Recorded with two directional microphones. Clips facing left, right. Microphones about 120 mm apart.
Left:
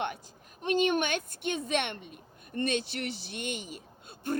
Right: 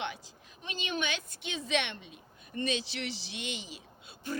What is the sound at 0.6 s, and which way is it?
A woman's voice, 55° left (ahead or behind).